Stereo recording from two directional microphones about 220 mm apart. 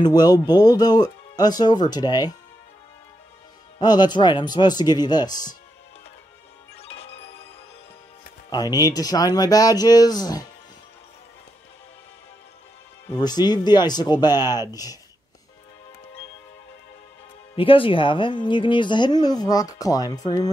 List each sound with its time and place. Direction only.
0.0 s speech: 20° left (ahead or behind)
3.8 s speech: 20° left (ahead or behind)
6.8 s music: 25° left (ahead or behind)
8.5 s speech: 15° left (ahead or behind)
13.2 s speech: 20° left (ahead or behind)
17.6 s speech: 25° left (ahead or behind)